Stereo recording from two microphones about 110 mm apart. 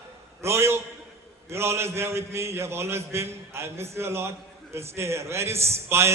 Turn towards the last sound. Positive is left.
turn(degrees=-25)  # may be behind; listen again after turning